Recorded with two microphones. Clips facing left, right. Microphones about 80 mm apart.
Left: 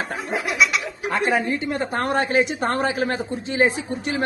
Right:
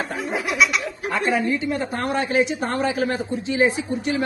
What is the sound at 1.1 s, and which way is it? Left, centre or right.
A man's voice, left.